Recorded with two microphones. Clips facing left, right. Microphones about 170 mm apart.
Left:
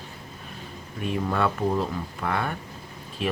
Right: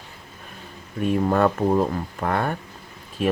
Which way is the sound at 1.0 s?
45° right (ahead or behind).